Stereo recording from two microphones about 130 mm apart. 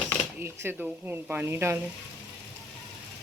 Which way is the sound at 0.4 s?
15° right (ahead or behind).